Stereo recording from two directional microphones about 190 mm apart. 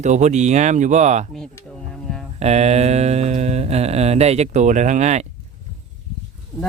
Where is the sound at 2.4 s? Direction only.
35° right (ahead or behind).